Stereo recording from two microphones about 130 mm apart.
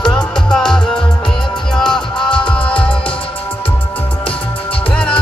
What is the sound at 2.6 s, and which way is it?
Music, 40° left (ahead or behind).